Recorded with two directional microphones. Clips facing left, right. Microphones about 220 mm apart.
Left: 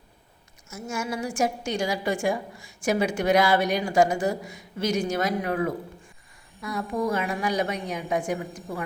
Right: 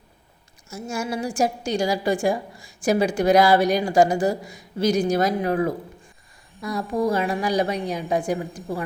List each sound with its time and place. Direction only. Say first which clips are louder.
0.7 s a woman's voice: right 3 dB; 35° right (ahead or behind)